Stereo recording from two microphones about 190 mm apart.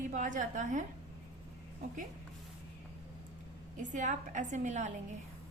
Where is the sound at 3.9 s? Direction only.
40° right (ahead or behind).